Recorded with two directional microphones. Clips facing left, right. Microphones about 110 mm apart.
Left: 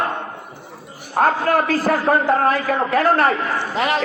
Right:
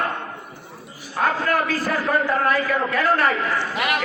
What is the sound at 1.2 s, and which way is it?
Speech, 45° left (ahead or behind).